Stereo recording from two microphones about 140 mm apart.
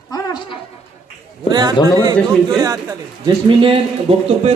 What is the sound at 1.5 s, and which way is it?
A man's voice, 30° right (ahead or behind).